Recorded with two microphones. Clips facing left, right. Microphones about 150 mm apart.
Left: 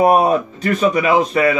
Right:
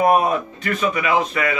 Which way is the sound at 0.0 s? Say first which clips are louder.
Left 4 dB; 35° left (ahead or behind).